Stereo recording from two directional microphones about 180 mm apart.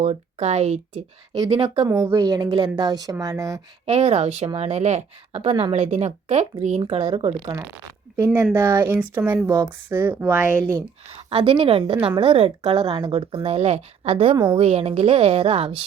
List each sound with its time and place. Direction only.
0.0 s speech: 40° right (ahead or behind)
1.3 s speech: 25° right (ahead or behind)
3.9 s speech: 35° right (ahead or behind)
8.5 s speech: 25° right (ahead or behind)
8.8 s speech: 10° right (ahead or behind)
10.6 s speech: 20° right (ahead or behind)